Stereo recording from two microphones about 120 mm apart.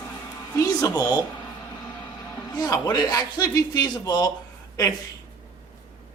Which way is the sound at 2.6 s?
35° left (ahead or behind).